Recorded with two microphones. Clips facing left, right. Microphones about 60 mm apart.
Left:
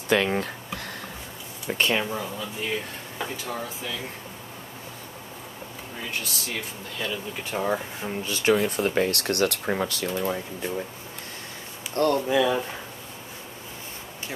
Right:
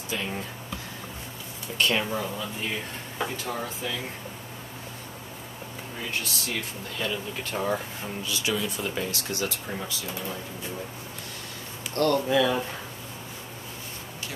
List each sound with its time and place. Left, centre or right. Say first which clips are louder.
0.1 s speech: left 10 dB; left
2.0 s speech: even; centre
6.2 s speech: even; centre
8.2 s speech: left 7 dB; left
11.9 s speech: left 1 dB; left